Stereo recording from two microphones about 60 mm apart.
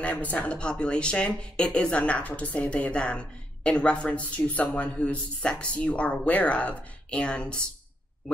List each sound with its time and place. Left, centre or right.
0.0 s speech: left